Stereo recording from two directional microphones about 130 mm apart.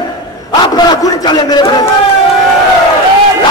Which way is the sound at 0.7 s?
30° left (ahead or behind).